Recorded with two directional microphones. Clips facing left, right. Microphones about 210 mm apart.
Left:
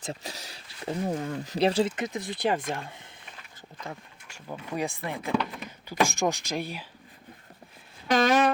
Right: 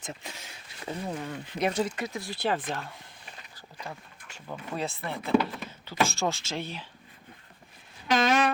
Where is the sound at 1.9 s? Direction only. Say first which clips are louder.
Left 3 dB; 20° left (ahead or behind).